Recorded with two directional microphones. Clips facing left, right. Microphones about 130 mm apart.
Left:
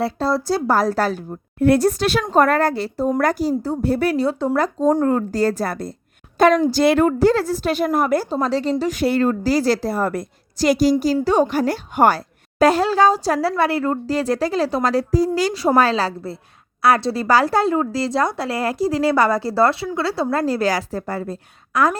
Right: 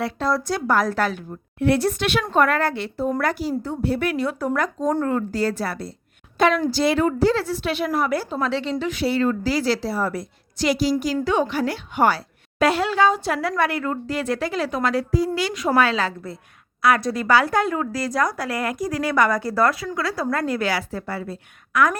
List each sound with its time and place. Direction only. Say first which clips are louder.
0.0 s a woman's voice: left 3 dB; 30° left (ahead or behind); by 5.9 s 45° left (ahead or behind)
6.3 s a sound: left 5 dB; 40° left (ahead or behind)
6.7 s a woman's voice: left 4 dB; 50° left (ahead or behind); by 21.9 s 35° left (ahead or behind)